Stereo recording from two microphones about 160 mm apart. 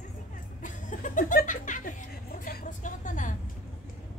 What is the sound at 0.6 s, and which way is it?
Music, 55° left (ahead or behind).